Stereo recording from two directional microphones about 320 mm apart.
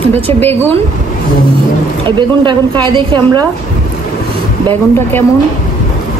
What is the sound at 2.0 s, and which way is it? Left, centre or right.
Speech, centre.